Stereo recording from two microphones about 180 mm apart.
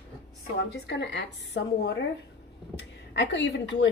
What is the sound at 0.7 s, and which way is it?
Speech, 70° left (ahead or behind).